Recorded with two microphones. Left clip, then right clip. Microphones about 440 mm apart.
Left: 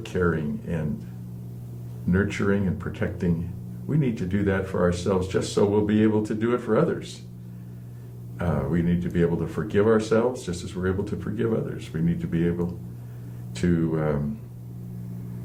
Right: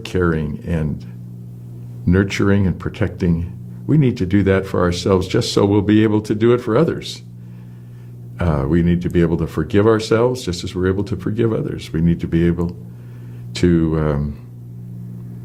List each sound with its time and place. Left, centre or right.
0.0 s speech: right
2.0 s speech: right
8.4 s speech: right
13.5 s speech: right